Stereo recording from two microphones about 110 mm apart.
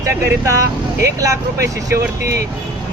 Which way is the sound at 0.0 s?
30° right (ahead or behind).